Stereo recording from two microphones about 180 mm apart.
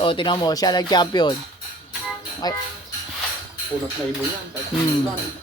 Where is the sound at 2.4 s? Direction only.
20° left (ahead or behind).